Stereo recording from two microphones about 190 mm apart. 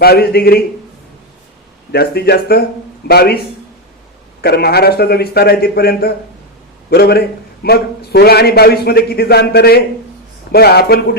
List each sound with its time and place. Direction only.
0.0 s a man's voice: 55° left (ahead or behind)
1.9 s a man's voice: 55° left (ahead or behind)